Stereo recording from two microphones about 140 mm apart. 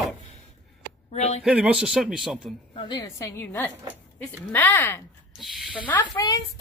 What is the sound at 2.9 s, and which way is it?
A woman's voice, 25° left (ahead or behind).